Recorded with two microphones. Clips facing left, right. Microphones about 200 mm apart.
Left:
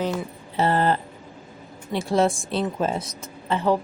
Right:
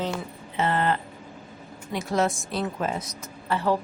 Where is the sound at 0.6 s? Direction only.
35° left (ahead or behind).